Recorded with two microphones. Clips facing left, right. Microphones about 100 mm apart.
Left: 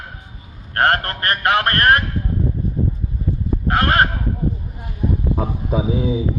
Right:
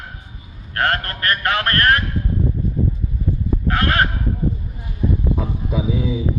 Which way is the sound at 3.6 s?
35° left (ahead or behind).